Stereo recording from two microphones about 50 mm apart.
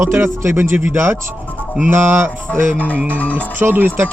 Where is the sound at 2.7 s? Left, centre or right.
Left.